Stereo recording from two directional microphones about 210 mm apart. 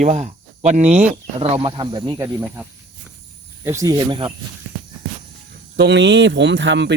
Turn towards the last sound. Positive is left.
turn(degrees=-55)  # may be behind; listen again after turning